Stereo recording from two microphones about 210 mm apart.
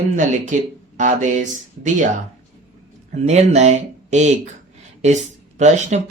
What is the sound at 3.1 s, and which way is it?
Speech, 30° right (ahead or behind).